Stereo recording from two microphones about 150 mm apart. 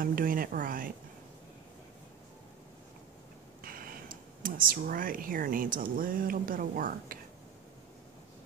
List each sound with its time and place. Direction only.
0.0 s a woman's voice: 70° right (ahead or behind)
3.6 s speech: 75° right (ahead or behind)